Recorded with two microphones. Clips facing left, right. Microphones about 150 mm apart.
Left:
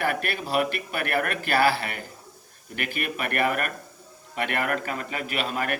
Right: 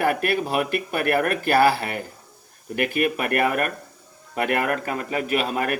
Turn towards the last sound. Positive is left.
turn(degrees=-40)  # may be behind; listen again after turning